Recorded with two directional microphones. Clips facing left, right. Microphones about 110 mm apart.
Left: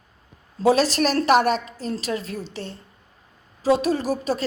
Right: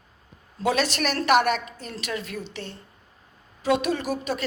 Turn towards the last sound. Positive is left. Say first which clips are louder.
# left 4 dB
turn(degrees=35)  # may be behind; listen again after turning